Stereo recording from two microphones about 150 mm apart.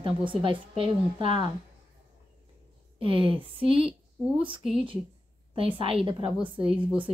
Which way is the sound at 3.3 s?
35° right (ahead or behind).